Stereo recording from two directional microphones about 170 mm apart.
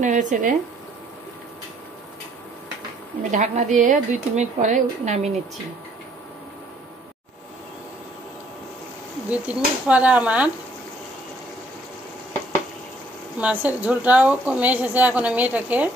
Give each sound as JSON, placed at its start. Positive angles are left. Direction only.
{"t": 0.0, "sound": "a woman's voice", "side_deg": -45}
{"t": 3.3, "sound": "a woman's voice", "side_deg": -45}
{"t": 9.5, "sound": "a woman's voice", "side_deg": -5}
{"t": 13.4, "sound": "a woman's voice", "side_deg": -10}